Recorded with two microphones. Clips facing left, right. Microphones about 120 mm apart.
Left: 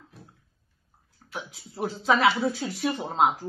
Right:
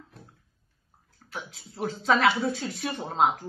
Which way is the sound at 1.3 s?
5° left (ahead or behind).